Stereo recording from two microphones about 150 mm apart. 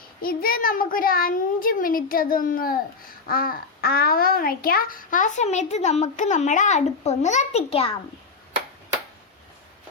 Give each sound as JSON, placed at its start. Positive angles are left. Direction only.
{"t": 0.2, "sound": "a child's voice", "side_deg": 75}